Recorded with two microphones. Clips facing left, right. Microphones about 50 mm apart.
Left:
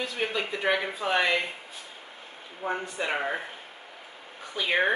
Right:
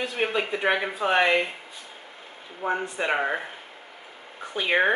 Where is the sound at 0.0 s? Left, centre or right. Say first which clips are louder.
Right 4 dB; right.